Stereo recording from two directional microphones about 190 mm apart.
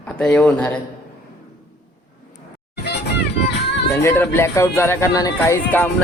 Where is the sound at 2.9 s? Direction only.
60° left (ahead or behind).